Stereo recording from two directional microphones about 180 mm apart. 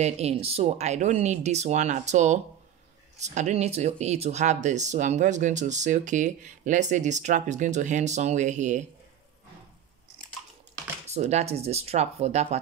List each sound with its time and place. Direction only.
0.0 s speech: 35° right (ahead or behind)
11.1 s speech: 40° right (ahead or behind)